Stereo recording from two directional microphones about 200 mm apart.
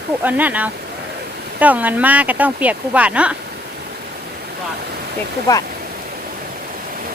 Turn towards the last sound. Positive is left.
turn(degrees=15)  # may be behind; listen again after turning